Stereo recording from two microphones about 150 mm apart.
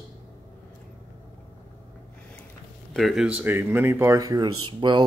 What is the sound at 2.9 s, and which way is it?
Speech, centre (ahead or behind).